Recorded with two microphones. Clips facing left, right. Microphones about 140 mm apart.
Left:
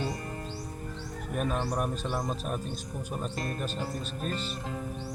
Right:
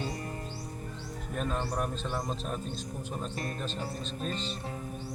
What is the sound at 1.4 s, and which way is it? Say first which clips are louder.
Speech: left 2 dB; 10° left (ahead or behind).